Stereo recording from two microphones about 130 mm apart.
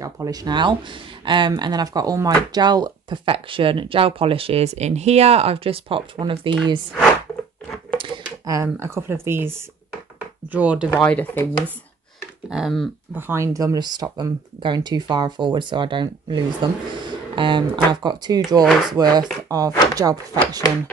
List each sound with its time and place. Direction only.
0.0 s speech: 30° right (ahead or behind)
8.7 s speech: 20° right (ahead or behind)
10.9 s speech: 10° left (ahead or behind)
12.4 s speech: 5° right (ahead or behind)
13.1 s speech: 20° right (ahead or behind)
18.6 s speech: centre (ahead or behind)
18.9 s speech: 30° right (ahead or behind)